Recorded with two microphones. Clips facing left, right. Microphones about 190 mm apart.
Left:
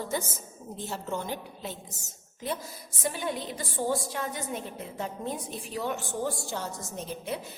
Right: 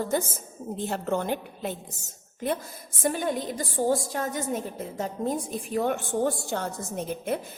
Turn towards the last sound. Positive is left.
turn(degrees=-55)  # may be behind; listen again after turning